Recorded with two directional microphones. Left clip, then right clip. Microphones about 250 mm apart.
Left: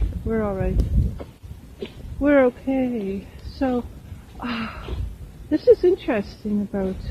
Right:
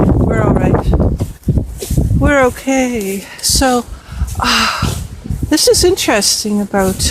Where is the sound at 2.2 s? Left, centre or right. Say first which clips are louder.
Right 5 dB; right.